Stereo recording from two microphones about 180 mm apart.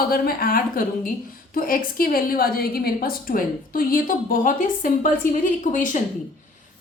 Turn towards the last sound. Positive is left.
turn(degrees=45)  # may be behind; listen again after turning